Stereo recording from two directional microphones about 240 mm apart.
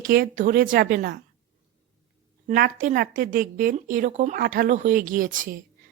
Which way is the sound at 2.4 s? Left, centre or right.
Right.